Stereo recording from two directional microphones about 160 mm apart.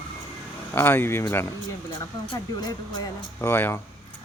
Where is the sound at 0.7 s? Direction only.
15° left (ahead or behind).